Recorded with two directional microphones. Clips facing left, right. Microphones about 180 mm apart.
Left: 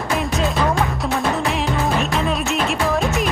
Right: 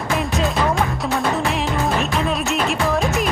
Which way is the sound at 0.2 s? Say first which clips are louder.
Even; centre (ahead or behind).